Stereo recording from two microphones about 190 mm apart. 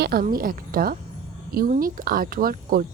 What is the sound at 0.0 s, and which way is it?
A woman's voice, 50° right (ahead or behind).